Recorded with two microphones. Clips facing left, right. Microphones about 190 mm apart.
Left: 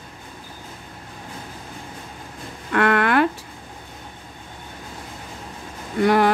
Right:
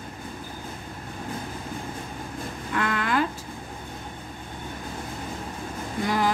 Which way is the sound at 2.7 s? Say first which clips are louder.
Left 8 dB; 65° left (ahead or behind).